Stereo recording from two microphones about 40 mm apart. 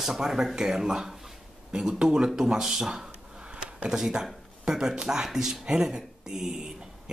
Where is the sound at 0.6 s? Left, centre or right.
Centre.